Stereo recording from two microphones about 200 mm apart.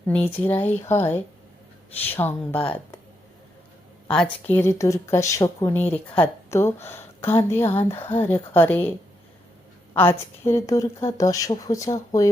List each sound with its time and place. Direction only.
0.1 s speech: 10° left (ahead or behind)
4.1 s speech: 5° left (ahead or behind)